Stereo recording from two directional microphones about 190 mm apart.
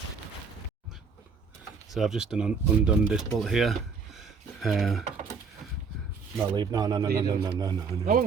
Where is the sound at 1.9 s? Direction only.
Centre (ahead or behind).